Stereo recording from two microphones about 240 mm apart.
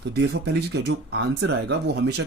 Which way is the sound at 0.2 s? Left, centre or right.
Right.